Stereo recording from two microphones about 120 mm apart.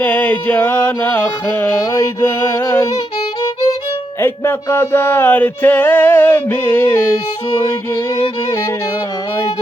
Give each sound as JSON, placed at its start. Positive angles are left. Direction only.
{"t": 0.0, "sound": "music", "side_deg": 10}
{"t": 4.2, "sound": "music", "side_deg": 20}
{"t": 7.5, "sound": "music", "side_deg": 30}